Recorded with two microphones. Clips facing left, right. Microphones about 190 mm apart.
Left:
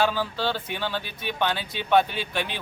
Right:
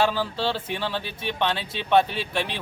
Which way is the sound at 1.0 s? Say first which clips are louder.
Right 2 dB; 30° right (ahead or behind).